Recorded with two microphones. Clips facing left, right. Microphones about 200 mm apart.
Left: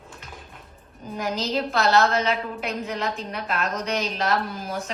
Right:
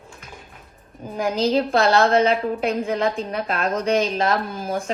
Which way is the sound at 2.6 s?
50° right (ahead or behind).